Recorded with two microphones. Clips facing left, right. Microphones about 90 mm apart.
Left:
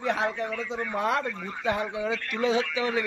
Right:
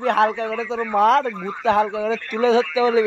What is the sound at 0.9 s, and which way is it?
Speech, 90° right.